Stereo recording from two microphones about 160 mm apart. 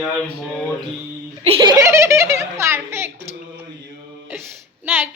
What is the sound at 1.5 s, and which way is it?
Giggle, 30° right (ahead or behind).